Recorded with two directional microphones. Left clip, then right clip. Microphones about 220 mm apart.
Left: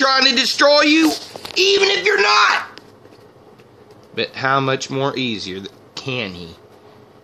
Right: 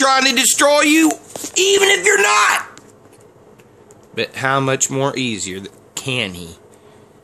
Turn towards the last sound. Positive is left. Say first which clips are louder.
# right 3 dB
turn(degrees=-15)  # may be behind; listen again after turning